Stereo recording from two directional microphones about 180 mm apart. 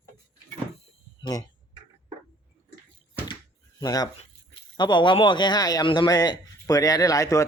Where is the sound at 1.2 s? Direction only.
20° left (ahead or behind).